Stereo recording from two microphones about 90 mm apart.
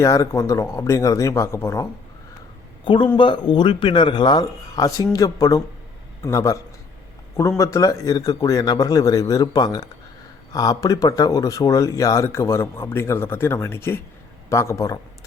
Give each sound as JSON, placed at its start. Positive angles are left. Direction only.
{"t": 0.0, "sound": "speech", "side_deg": 35}
{"t": 2.8, "sound": "speech", "side_deg": 65}